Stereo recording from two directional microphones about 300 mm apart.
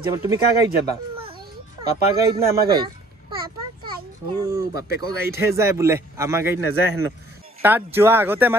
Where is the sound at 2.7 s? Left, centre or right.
Centre.